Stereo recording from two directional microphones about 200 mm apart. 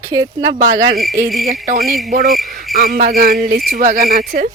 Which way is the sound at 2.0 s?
45° right (ahead or behind).